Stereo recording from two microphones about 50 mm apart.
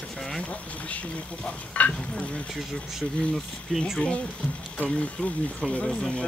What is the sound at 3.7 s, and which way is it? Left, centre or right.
Speech, centre.